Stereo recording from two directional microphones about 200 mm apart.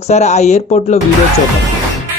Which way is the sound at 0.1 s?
35° left (ahead or behind).